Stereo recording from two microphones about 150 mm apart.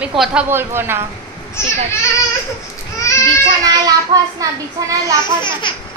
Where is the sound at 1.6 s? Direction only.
15° left (ahead or behind).